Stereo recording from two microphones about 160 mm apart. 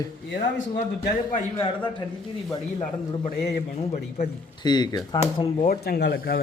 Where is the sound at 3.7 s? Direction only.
45° left (ahead or behind).